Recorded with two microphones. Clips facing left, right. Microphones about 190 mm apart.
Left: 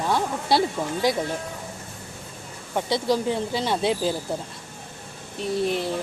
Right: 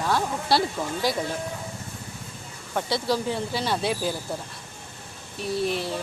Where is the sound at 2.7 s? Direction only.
20° left (ahead or behind).